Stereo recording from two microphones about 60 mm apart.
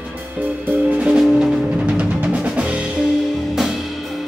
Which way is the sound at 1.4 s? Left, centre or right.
Centre.